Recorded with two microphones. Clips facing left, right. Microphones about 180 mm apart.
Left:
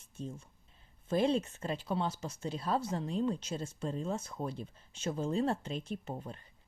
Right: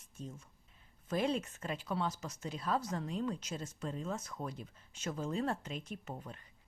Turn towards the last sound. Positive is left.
turn(degrees=30)  # may be behind; listen again after turning